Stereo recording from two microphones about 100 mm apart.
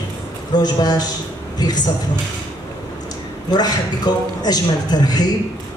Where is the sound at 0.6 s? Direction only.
40° left (ahead or behind).